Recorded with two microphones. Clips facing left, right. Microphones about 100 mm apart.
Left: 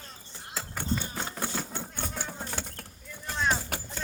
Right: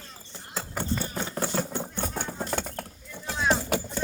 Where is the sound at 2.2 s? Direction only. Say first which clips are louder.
Right 6 dB; 50° right (ahead or behind).